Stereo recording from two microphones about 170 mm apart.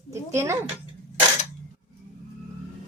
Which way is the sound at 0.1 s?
15° right (ahead or behind).